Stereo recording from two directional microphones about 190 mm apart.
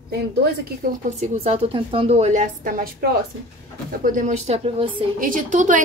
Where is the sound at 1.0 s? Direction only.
35° right (ahead or behind); by 3.2 s 50° right (ahead or behind).